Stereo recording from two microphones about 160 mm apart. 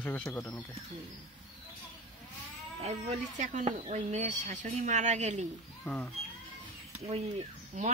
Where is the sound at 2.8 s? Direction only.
40° right (ahead or behind).